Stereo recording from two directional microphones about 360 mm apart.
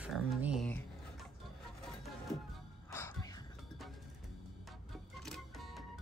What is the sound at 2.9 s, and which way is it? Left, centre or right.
Music, centre.